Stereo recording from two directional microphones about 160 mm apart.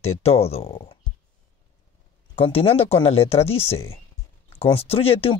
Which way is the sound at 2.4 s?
35° left (ahead or behind).